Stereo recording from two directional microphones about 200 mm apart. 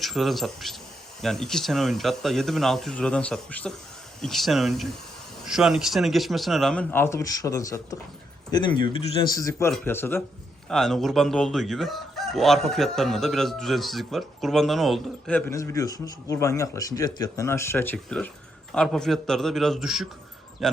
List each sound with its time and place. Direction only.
0.0 s fowl: centre (ahead or behind); by 7.9 s 15° left (ahead or behind)
8.4 s a man's voice: 20° left (ahead or behind)
10.7 s fowl: centre (ahead or behind)